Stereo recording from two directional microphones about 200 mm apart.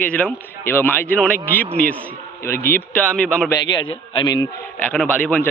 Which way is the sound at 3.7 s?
20° left (ahead or behind).